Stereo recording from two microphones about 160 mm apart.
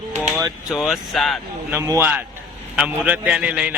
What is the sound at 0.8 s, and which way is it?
Speech, centre (ahead or behind).